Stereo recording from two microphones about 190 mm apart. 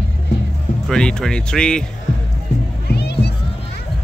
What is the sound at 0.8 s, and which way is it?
Speech, 5° left (ahead or behind).